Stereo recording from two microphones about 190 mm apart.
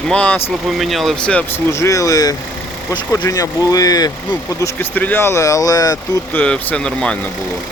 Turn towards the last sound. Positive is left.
turn(degrees=5)  # may be behind; listen again after turning